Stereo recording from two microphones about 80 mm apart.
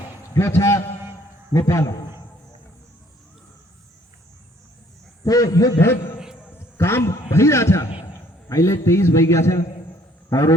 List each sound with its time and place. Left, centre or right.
0.3 s a man's voice: left
5.2 s a man's voice: left
5.8 s a man's voice: left